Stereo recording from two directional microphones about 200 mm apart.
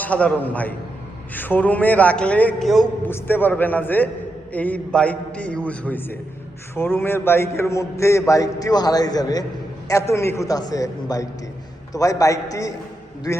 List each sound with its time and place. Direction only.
0.0 s a man's voice: 5° left (ahead or behind)